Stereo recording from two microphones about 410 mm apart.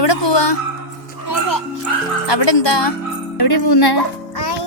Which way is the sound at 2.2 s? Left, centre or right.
Left.